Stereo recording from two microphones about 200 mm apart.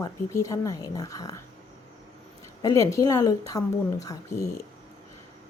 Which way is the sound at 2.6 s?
15° left (ahead or behind).